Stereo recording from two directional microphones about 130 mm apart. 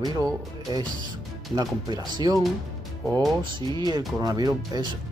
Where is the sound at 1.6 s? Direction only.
30° right (ahead or behind).